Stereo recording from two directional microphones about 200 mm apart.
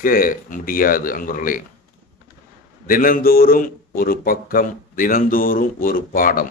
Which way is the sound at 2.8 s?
45° left (ahead or behind).